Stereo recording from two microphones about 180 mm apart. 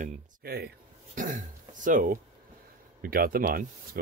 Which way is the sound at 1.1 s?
45° right (ahead or behind).